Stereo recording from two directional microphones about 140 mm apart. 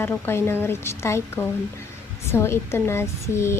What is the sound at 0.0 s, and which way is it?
Speech, 15° left (ahead or behind).